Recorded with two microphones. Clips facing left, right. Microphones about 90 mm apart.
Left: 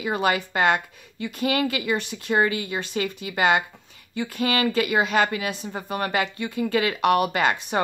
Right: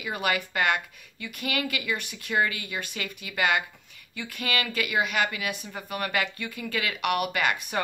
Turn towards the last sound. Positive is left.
turn(degrees=30)  # may be behind; listen again after turning